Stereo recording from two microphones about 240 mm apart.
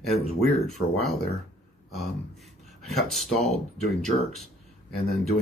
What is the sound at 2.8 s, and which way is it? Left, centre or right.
Speech, centre.